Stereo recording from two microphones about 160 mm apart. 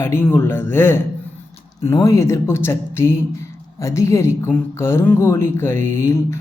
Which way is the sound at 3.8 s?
20° left (ahead or behind).